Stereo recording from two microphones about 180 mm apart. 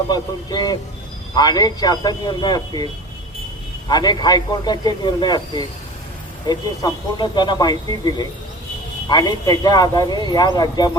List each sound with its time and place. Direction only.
0.1 s a man's voice: 20° left (ahead or behind)
3.8 s a man's voice: 25° left (ahead or behind)